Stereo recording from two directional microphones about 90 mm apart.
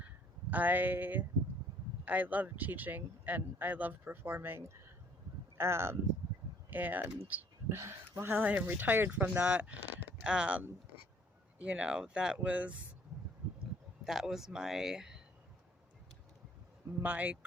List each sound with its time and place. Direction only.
0.5 s speech: 20° right (ahead or behind)
7.3 s a sound: 20° right (ahead or behind)
7.8 s speech: 30° right (ahead or behind)
14.0 s speech: 5° right (ahead or behind)
17.0 s speech: 20° right (ahead or behind)